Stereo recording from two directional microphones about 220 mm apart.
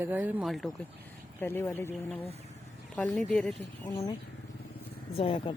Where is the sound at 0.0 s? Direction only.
10° right (ahead or behind).